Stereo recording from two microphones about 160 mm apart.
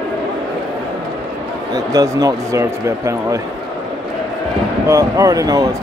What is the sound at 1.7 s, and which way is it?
Speech, 20° right (ahead or behind).